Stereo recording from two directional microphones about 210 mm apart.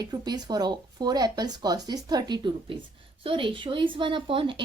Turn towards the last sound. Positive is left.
turn(degrees=-25)  # may be behind; listen again after turning